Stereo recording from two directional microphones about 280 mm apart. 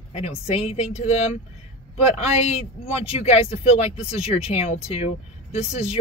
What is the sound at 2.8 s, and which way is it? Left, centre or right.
Speech, left.